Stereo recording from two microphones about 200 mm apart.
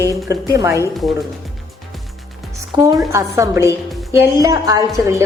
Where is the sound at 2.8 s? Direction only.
15° right (ahead or behind).